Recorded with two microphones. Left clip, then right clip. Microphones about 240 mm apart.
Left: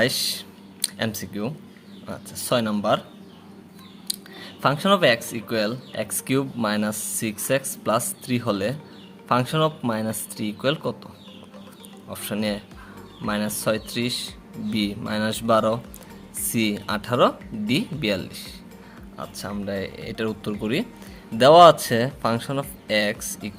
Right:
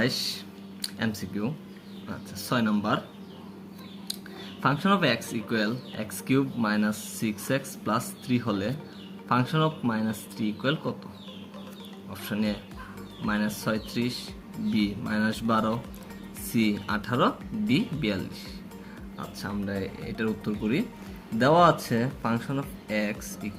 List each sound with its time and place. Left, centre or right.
0.0 s a sound: left
2.0 s speech: left
4.6 s speech: left
12.1 s speech: left